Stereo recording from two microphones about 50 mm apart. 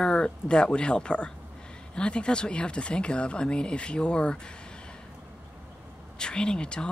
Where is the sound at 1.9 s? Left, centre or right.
Left.